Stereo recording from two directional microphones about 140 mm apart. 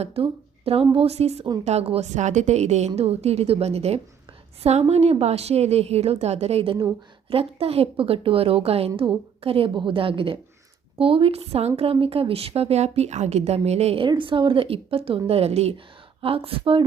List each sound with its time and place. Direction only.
0.0 s a woman's voice: 45° right (ahead or behind)